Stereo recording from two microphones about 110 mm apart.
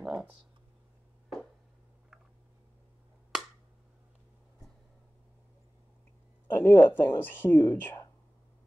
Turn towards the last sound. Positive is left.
turn(degrees=15)  # may be behind; listen again after turning